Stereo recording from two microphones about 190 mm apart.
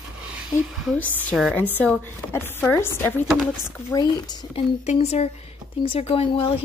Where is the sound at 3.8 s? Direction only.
20° left (ahead or behind).